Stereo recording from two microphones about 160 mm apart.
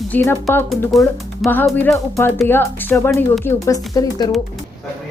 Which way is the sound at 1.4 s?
10° left (ahead or behind).